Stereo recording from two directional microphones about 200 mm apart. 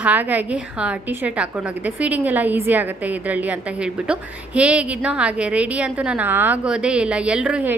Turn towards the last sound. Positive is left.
turn(degrees=-5)  # may be behind; listen again after turning